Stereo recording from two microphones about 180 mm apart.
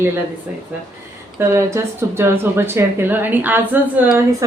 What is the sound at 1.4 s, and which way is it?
Speech, 15° right (ahead or behind).